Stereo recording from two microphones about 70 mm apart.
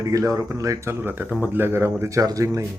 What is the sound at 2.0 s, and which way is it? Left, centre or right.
Speech, right.